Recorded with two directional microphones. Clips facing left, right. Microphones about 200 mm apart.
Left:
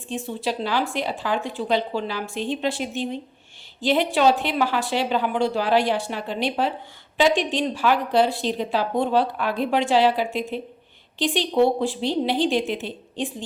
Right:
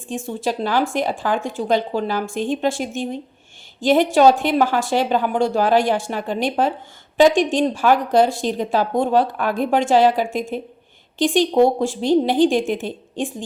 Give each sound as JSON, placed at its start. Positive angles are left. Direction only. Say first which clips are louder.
{"t": 0.1, "sound": "a woman's voice", "louder": "right 3 dB", "side_deg": -45}